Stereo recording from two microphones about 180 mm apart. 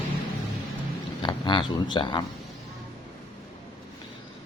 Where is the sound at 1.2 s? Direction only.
25° left (ahead or behind).